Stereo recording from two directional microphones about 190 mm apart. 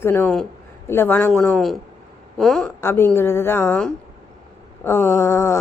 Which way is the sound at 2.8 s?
15° left (ahead or behind).